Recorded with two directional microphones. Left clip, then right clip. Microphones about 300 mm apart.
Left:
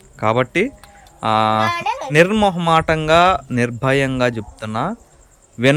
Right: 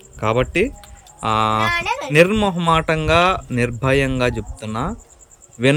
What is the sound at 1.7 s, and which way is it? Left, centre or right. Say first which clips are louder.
Music: even; left.